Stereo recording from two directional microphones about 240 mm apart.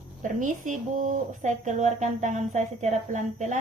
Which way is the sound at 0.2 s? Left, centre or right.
Right.